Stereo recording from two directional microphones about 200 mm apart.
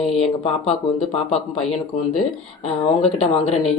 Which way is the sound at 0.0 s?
30° left (ahead or behind).